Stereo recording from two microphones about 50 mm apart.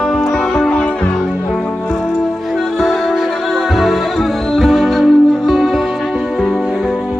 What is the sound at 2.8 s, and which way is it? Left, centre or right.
Music, centre.